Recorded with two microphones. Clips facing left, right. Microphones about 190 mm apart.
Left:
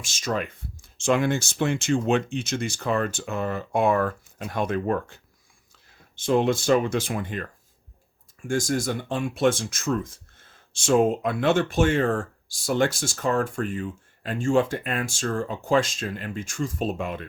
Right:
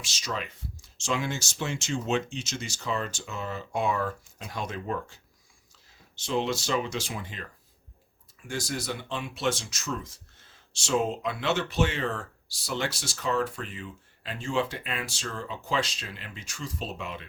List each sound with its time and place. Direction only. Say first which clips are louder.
0.0 s speech: left 7 dB; 50° left (ahead or behind)